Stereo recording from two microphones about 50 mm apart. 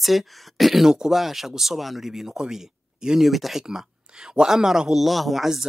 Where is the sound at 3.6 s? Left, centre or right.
Centre.